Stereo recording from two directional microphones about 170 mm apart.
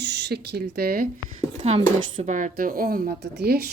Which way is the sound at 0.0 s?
90° right.